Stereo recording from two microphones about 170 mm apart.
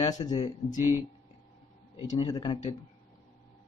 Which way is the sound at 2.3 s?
30° left (ahead or behind).